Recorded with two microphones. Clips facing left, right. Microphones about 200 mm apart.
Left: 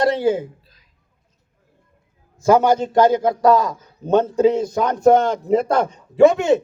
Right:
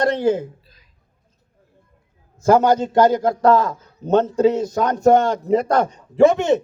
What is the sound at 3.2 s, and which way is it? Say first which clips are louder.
Speech: even; 15° left (ahead or behind).